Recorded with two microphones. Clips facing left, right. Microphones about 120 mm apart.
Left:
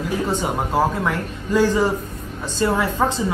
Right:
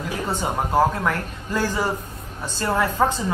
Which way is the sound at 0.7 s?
10° left (ahead or behind).